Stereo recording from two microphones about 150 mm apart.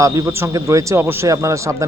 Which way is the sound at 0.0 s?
20° right (ahead or behind).